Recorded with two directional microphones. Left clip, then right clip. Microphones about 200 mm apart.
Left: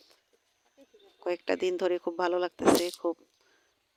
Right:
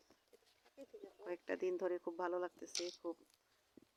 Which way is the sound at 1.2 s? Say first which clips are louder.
Left 13 dB; 45° left (ahead or behind).